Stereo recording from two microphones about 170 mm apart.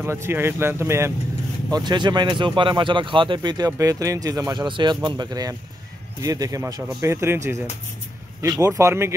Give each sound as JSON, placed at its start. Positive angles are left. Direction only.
{"t": 0.0, "sound": "speech", "side_deg": -15}